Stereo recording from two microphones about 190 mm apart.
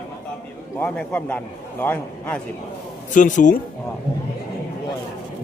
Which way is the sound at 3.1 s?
40° left (ahead or behind).